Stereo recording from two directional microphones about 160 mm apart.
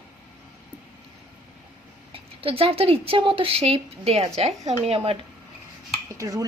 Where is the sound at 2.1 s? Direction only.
35° right (ahead or behind).